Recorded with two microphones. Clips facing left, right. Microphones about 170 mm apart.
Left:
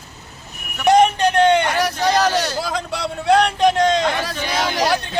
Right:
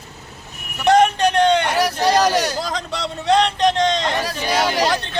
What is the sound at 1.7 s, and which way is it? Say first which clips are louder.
Speech: right 1 dB; 10° right (ahead or behind).